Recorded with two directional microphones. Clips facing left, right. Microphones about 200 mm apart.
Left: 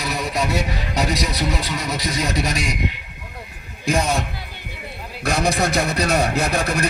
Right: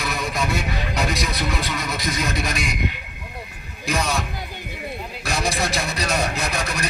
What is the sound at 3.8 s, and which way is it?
Speech, 50° left (ahead or behind).